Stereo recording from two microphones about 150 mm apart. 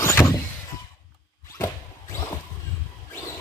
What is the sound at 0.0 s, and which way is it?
Sliding door, 20° left (ahead or behind).